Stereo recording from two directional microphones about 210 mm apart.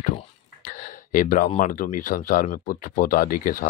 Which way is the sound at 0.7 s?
40° left (ahead or behind).